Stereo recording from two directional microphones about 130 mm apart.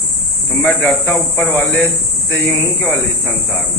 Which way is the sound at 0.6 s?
15° left (ahead or behind).